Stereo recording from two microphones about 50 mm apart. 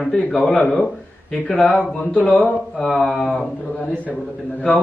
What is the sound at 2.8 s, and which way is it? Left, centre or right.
Speech, centre.